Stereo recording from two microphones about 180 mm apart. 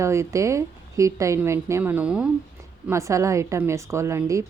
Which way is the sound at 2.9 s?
15° right (ahead or behind).